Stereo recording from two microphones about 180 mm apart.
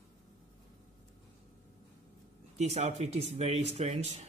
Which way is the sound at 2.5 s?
35° right (ahead or behind).